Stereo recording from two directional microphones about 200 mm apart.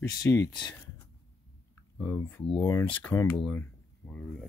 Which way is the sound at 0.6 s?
15° left (ahead or behind).